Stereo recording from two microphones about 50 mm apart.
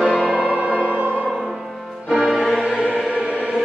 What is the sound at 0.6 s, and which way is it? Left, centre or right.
Music, right.